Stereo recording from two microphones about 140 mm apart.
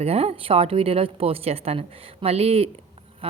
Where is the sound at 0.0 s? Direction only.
45° right (ahead or behind).